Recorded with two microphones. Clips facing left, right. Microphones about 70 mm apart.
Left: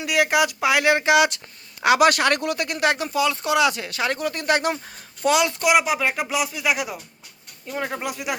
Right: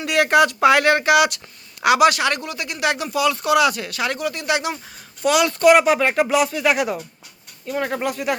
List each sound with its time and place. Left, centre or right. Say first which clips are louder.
0.0 s speech: right 4 dB; centre; by 2.0 s left
2.0 s speech: even; left
2.9 s speech: right 2 dB; left
5.2 s speech: right 2 dB; left
5.6 s speech: right 10 dB; centre
8.0 s speech: right 5 dB; centre